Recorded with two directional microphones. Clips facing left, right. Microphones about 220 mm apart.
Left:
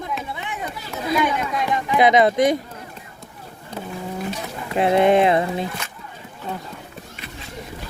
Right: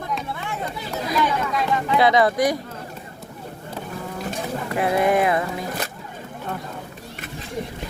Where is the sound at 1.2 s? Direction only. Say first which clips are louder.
Even; 15° left (ahead or behind).